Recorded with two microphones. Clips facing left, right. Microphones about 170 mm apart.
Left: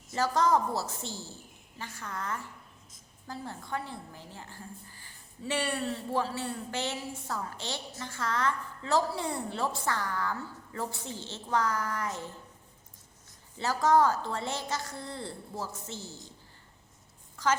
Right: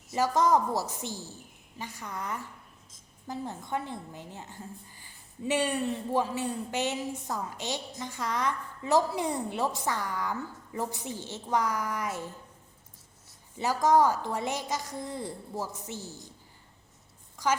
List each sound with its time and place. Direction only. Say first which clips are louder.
0.1 s a woman's voice: right 2 dB; 15° right (ahead or behind)
13.6 s a woman's voice: right 1 dB; 15° right (ahead or behind)
17.3 s speech: even; 15° right (ahead or behind)